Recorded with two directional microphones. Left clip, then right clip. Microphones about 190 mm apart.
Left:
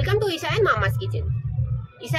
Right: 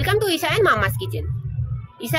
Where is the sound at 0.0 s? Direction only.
55° right (ahead or behind).